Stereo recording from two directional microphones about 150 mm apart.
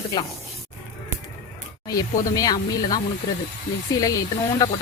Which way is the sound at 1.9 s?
25° left (ahead or behind).